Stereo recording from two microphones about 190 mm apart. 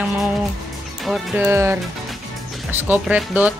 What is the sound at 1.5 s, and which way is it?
Speech, 15° right (ahead or behind).